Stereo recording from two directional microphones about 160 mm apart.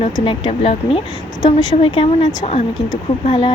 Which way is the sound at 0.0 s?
35° left (ahead or behind).